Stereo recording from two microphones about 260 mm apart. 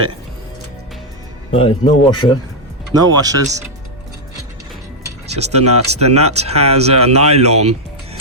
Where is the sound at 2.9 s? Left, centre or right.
Centre.